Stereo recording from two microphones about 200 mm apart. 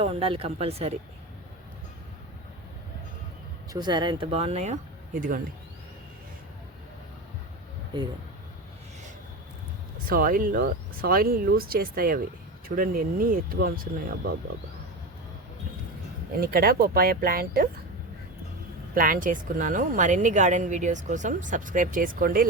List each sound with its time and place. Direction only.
0.0 s speech: 30° right (ahead or behind)
3.7 s speech: 20° right (ahead or behind); by 5.4 s 45° right (ahead or behind)
7.9 s speech: 20° right (ahead or behind)
10.1 s speech: 45° right (ahead or behind)
16.4 s speech: 50° right (ahead or behind)
18.9 s speech: 45° right (ahead or behind)